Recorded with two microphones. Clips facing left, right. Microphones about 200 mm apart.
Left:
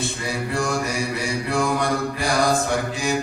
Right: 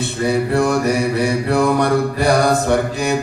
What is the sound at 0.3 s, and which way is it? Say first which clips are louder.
Mantra: right 9 dB; 60° right (ahead or behind).